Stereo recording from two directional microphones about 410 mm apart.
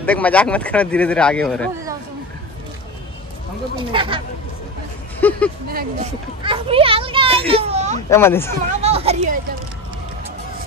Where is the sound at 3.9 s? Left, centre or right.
Centre.